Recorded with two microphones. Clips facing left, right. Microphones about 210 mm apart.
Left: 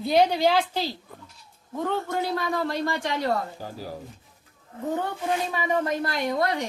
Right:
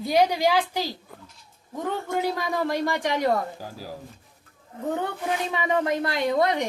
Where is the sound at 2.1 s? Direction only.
15° right (ahead or behind).